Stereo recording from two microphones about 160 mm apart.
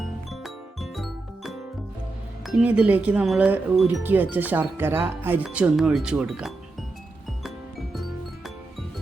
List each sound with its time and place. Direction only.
0.0 s music: centre (ahead or behind)
2.5 s speech: 5° right (ahead or behind)